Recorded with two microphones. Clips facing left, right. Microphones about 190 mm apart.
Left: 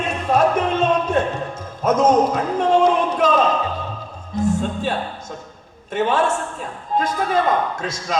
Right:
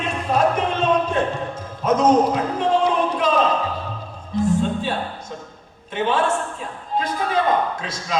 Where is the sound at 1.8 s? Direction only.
45° left (ahead or behind).